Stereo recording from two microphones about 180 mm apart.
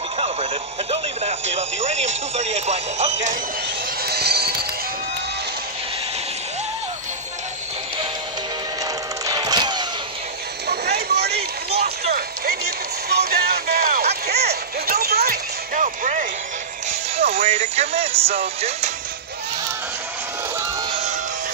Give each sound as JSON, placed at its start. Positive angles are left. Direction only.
{"t": 0.2, "sound": "radio", "side_deg": -35}
{"t": 4.0, "sound": "music", "side_deg": -65}
{"t": 9.2, "sound": "music", "side_deg": -20}
{"t": 10.7, "sound": "a sound", "side_deg": -65}
{"t": 11.7, "sound": "a sound", "side_deg": -35}
{"t": 12.1, "sound": "music", "side_deg": -60}
{"t": 17.2, "sound": "speech", "side_deg": -35}